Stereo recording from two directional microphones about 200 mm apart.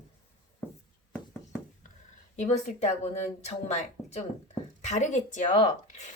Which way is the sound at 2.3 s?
35° left (ahead or behind).